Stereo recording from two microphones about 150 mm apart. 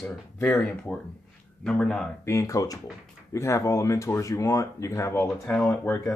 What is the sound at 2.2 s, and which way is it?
Speech, 20° left (ahead or behind).